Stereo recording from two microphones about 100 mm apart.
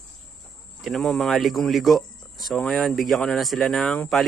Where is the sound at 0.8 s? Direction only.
Centre (ahead or behind).